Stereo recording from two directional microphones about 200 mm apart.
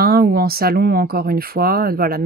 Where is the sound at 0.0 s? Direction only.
50° right (ahead or behind).